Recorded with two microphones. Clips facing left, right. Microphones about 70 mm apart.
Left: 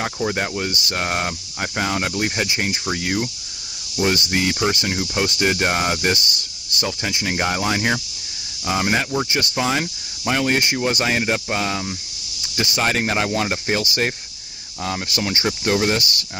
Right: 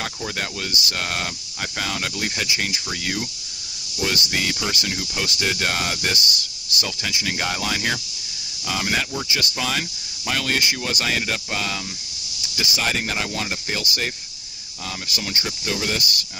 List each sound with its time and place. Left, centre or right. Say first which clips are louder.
0.0 s speech: left 6 dB; left
10.6 s speech: left 4 dB; left
12.5 s speech: left 4 dB; left